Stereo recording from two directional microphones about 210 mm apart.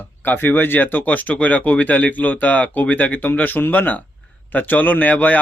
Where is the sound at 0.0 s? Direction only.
10° left (ahead or behind).